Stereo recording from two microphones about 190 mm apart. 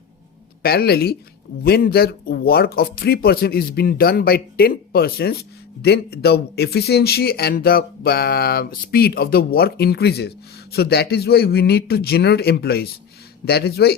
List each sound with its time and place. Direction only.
0.6 s speech: 55° left (ahead or behind)